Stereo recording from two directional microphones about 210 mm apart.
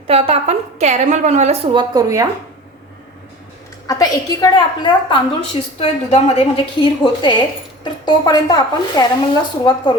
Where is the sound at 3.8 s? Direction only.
15° left (ahead or behind).